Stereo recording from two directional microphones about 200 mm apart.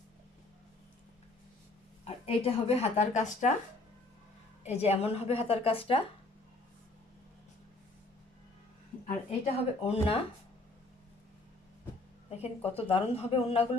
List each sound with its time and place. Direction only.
2.0 s speech: 30° left (ahead or behind)
4.6 s a woman's voice: 30° left (ahead or behind)
9.5 s a woman's voice: 30° left (ahead or behind)
12.3 s a woman's voice: 30° left (ahead or behind)